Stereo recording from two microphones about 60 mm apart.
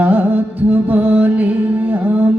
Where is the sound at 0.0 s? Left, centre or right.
Right.